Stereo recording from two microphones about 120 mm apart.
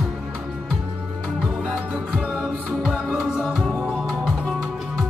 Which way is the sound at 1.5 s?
5° right (ahead or behind).